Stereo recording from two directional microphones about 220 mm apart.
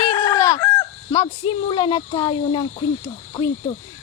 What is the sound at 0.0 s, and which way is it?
Chicken, 20° left (ahead or behind).